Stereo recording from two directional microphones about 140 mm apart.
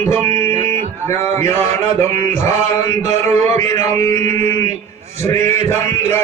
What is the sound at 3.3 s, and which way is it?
Music, 50° right (ahead or behind).